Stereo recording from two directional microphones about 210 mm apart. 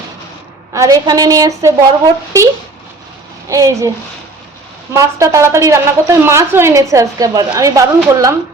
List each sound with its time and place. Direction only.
0.7 s a woman's voice: 15° right (ahead or behind)
3.5 s a woman's voice: 15° right (ahead or behind)
4.9 s a woman's voice: 15° right (ahead or behind)